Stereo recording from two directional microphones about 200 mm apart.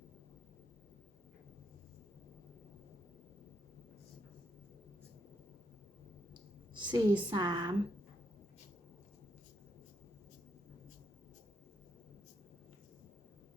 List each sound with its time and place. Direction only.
6.7 s a woman's voice: 20° right (ahead or behind)